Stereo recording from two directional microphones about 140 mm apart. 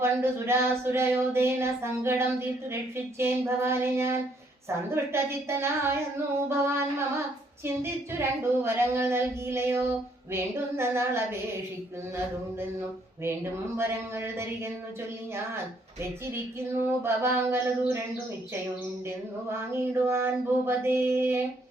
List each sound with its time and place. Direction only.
0.0 s a woman's voice: 20° right (ahead or behind)
6.5 s a sound: 20° right (ahead or behind)
7.6 s a woman's voice: 20° right (ahead or behind)
13.7 s a woman's voice: 15° right (ahead or behind)
16.0 s a woman's voice: 15° right (ahead or behind)
19.5 s a woman's voice: 20° right (ahead or behind)